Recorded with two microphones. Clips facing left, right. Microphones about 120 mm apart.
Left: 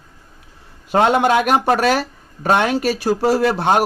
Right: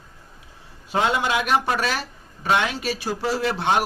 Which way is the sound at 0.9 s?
55° left (ahead or behind).